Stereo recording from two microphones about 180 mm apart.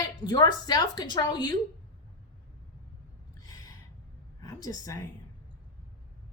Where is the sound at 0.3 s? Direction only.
25° left (ahead or behind).